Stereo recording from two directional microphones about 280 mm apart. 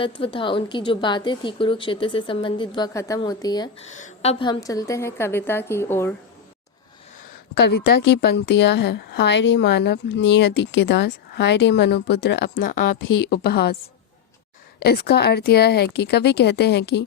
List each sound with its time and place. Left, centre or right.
0.0 s a woman's voice: centre
3.9 s a woman's voice: left; by 6.1 s centre
7.9 s a woman's voice: left
14.8 s a woman's voice: left